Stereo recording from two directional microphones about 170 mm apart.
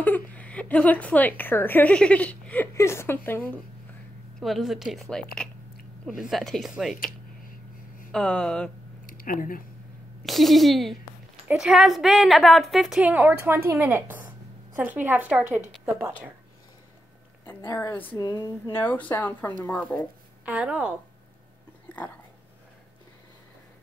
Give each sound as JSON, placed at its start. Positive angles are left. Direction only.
{"t": 0.0, "sound": "a woman's voice", "side_deg": 10}
{"t": 4.4, "sound": "a woman's voice", "side_deg": 0}
{"t": 8.1, "sound": "a woman's voice", "side_deg": 5}
{"t": 9.0, "sound": "a sound", "side_deg": 55}
{"t": 10.2, "sound": "a woman's voice", "side_deg": 0}
{"t": 17.6, "sound": "a woman's voice", "side_deg": 15}
{"t": 18.1, "sound": "a sound", "side_deg": 20}
{"t": 18.8, "sound": "a woman's voice", "side_deg": 10}
{"t": 20.4, "sound": "a woman's voice", "side_deg": -10}